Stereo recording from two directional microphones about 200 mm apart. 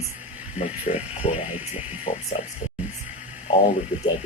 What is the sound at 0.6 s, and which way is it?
Speech, 30° left (ahead or behind).